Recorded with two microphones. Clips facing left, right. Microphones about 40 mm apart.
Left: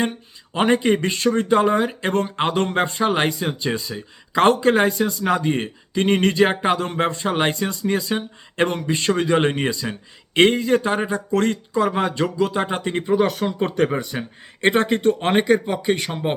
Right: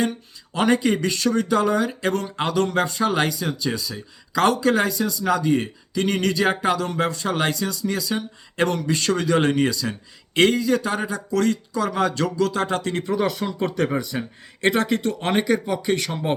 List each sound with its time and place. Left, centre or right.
0.5 s speech: left